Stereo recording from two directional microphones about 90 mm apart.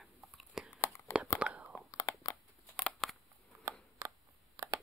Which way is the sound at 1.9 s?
35° left (ahead or behind).